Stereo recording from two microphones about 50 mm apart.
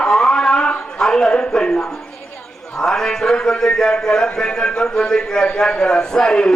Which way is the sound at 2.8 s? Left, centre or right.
Centre.